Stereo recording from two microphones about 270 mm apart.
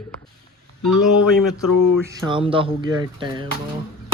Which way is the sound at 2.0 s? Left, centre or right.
Centre.